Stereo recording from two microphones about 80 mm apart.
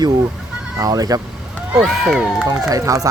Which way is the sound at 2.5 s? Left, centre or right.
Right.